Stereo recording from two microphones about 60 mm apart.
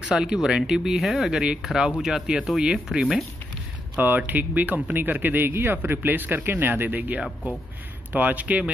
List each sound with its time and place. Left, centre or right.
0.1 s speech: centre
3.9 s a man's voice: right